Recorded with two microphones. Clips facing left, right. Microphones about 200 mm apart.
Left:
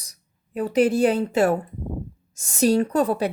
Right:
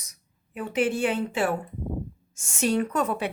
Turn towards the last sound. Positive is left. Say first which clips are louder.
# left 5 dB
turn(degrees=35)  # may be behind; listen again after turning